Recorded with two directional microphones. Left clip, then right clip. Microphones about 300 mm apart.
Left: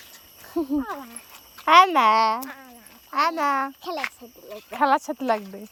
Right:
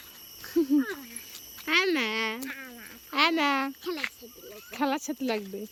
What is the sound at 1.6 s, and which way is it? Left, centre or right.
Speech, centre.